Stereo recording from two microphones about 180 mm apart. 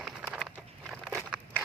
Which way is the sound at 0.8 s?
Centre (ahead or behind).